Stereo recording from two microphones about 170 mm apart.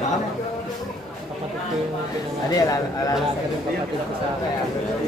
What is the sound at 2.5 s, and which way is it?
Speech, 20° left (ahead or behind).